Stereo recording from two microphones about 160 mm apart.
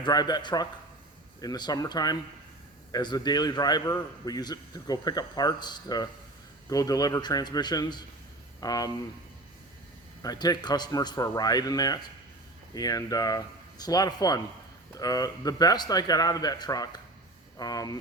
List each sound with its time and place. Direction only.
0.0 s a man's voice: 25° left (ahead or behind)
10.2 s a man's voice: 25° left (ahead or behind)